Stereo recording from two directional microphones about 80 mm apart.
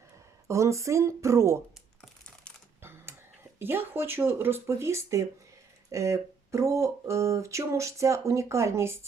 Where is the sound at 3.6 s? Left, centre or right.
Right.